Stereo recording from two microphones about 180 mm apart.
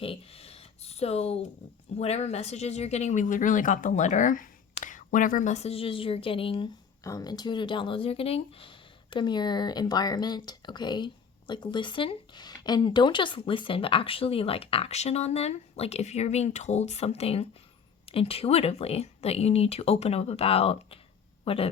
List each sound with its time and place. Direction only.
0.0 s speech: 30° left (ahead or behind)
7.0 s speech: 20° left (ahead or behind)